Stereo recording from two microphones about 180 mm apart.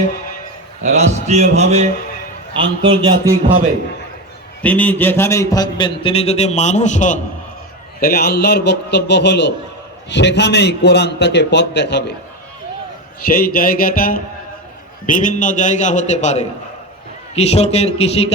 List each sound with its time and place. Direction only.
0.8 s a man's voice: 40° right (ahead or behind)
4.6 s a man's voice: 10° left (ahead or behind); by 7.2 s 45° left (ahead or behind)
8.0 s a man's voice: 60° left (ahead or behind)
13.2 s a man's voice: 55° left (ahead or behind); by 18.3 s 35° left (ahead or behind)